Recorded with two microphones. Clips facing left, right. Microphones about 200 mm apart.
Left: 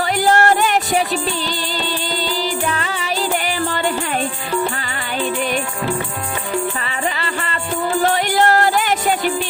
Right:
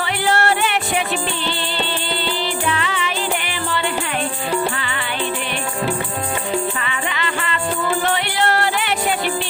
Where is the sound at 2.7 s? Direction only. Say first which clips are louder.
Right 1 dB; 40° left (ahead or behind).